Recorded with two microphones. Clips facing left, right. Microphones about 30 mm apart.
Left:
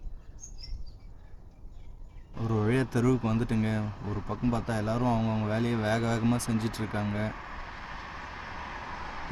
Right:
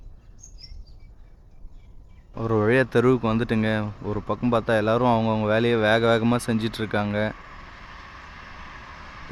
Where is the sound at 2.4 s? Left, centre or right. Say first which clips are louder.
Right 8 dB; right.